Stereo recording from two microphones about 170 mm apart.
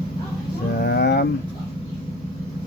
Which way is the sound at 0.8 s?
65° left (ahead or behind).